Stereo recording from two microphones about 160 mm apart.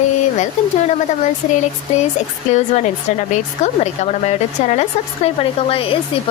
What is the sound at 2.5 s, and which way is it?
Speech, 45° left (ahead or behind).